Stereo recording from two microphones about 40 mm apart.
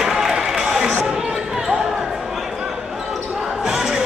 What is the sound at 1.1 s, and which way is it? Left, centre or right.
Basketball bounce, centre.